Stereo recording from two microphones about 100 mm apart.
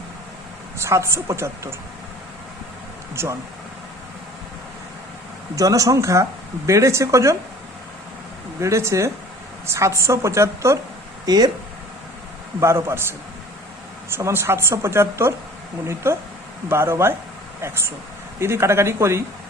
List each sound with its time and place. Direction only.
0.8 s a woman's voice: 30° right (ahead or behind)
3.2 s a woman's voice: 25° right (ahead or behind)
5.5 s speech: 35° right (ahead or behind)
8.6 s a woman's voice: 30° right (ahead or behind)
11.3 s speech: 40° right (ahead or behind)
12.5 s a woman's voice: 25° right (ahead or behind)
18.3 s a woman's voice: 25° right (ahead or behind)